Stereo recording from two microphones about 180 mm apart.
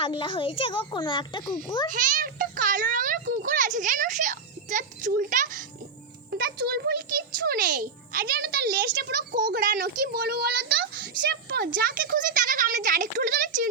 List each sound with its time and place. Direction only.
0.0 s a child's voice: 30° left (ahead or behind)
1.9 s a child's voice: 50° right (ahead or behind)
6.3 s a sound: 55° right (ahead or behind)
7.4 s a child's voice: 50° right (ahead or behind)